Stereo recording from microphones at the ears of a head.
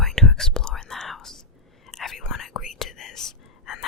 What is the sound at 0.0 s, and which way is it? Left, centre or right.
Whispering, centre.